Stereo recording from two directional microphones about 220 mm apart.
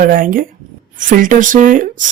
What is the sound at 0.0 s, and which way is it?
Speech, 40° right (ahead or behind).